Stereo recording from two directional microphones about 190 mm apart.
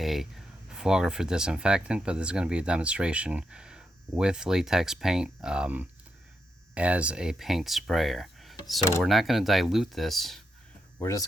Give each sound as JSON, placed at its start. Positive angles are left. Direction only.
{"t": 0.0, "sound": "a sound", "side_deg": 0}
{"t": 0.7, "sound": "speech", "side_deg": -5}
{"t": 11.0, "sound": "hum", "side_deg": 15}